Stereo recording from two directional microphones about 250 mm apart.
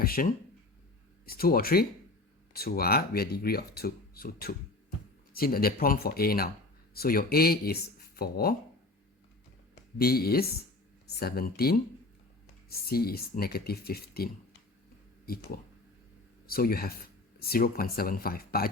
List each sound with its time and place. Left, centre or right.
0.0 s speech: left
10.0 s speech: left
16.5 s speech: left